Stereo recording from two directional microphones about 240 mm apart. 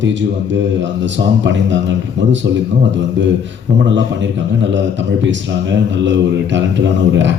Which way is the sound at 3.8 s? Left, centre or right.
Right.